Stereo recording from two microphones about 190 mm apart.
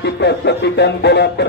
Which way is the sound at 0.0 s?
65° left (ahead or behind).